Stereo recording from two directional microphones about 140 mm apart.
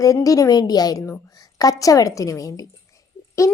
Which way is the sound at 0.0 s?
25° left (ahead or behind).